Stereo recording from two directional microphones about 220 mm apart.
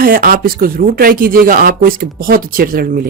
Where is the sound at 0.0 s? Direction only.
40° right (ahead or behind).